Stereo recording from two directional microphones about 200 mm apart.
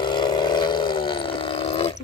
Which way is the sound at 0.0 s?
20° left (ahead or behind).